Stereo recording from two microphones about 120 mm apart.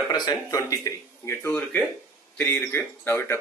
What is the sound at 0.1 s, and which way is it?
Speech, 35° left (ahead or behind).